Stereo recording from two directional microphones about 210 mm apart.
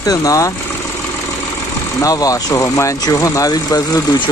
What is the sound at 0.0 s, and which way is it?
Speech, 15° left (ahead or behind).